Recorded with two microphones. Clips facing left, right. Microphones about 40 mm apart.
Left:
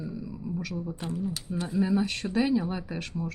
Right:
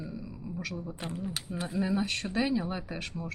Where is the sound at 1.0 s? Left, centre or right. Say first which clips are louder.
Left 3 dB; right.